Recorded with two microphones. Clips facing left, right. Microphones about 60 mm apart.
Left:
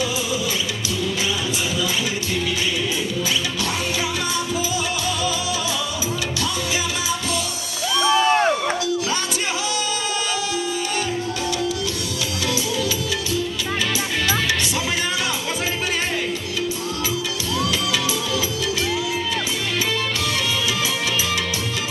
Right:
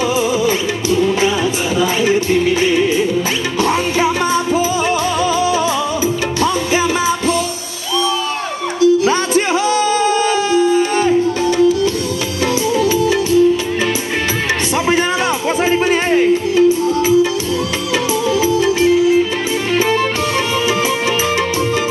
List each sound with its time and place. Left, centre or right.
0.9 s music: right
8.8 s music: right
10.5 s music: right
15.9 s music: right
18.4 s music: right